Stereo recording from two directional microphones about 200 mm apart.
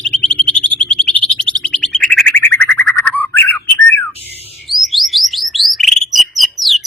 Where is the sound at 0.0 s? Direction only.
5° left (ahead or behind).